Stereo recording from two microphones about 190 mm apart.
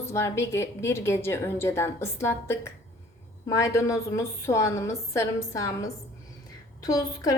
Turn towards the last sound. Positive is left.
turn(degrees=20)  # may be behind; listen again after turning